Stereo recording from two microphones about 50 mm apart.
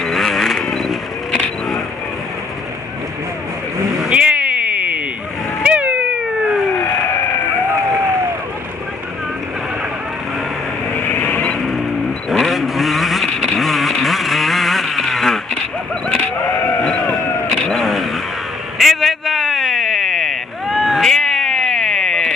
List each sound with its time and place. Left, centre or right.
0.0 s vehicle: centre
4.1 s a sound: right
5.6 s cat: right
11.0 s vehicle: left
11.2 s vehicle: left
12.3 s vehicle: centre
16.8 s vehicle: centre
18.8 s a sound: centre